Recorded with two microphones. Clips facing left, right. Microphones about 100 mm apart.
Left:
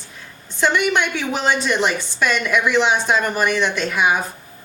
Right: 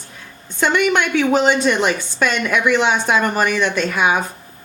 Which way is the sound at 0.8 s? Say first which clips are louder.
Right 4 dB; 50° right (ahead or behind).